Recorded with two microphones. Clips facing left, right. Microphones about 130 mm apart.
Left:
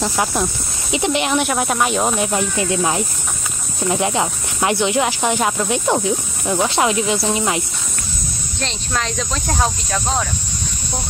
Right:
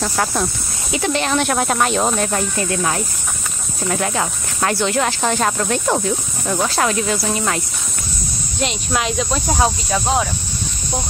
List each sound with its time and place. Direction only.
0.0 s speech: 10° left (ahead or behind)
8.5 s speech: 10° right (ahead or behind)